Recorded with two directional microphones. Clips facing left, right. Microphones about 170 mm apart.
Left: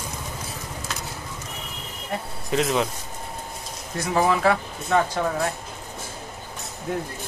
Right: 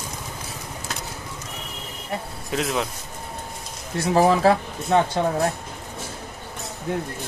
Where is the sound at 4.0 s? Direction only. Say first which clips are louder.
Right 3 dB; 35° right (ahead or behind).